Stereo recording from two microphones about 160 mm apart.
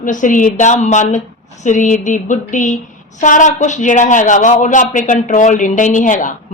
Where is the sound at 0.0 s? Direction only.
55° left (ahead or behind).